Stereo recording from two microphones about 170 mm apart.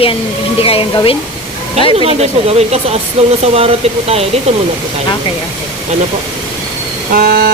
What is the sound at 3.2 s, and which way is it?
Speech, 40° right (ahead or behind).